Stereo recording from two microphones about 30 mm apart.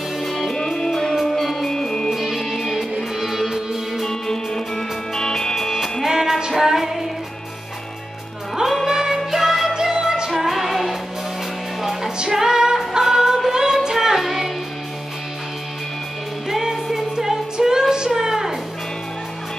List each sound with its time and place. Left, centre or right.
0.2 s music: centre
2.2 s music: centre
4.0 s music: centre
5.7 s music: centre
8.8 s music: centre
10.3 s music: centre
13.5 s singing: centre
13.9 s music: centre
16.4 s music: centre